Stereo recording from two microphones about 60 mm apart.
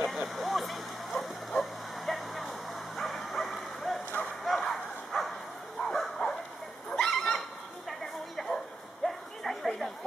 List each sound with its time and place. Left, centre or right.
0.0 s bow-wow: centre
6.9 s dog: centre
8.4 s a sound: centre